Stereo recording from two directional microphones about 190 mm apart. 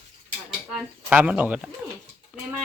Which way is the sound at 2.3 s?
5° left (ahead or behind).